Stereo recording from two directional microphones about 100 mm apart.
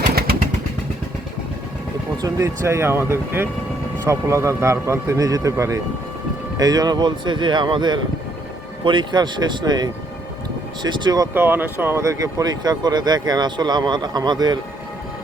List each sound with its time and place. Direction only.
2.2 s a man's voice: 30° right (ahead or behind); by 11.3 s 45° right (ahead or behind)
11.3 s speech: 20° right (ahead or behind); by 14.6 s 45° right (ahead or behind)